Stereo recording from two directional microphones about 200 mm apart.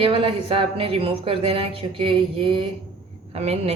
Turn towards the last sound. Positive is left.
turn(degrees=-30)  # may be behind; listen again after turning